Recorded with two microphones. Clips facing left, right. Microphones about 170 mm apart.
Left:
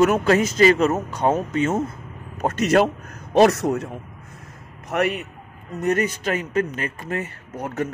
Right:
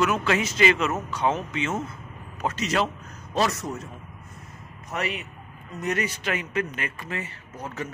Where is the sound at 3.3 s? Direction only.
65° left (ahead or behind).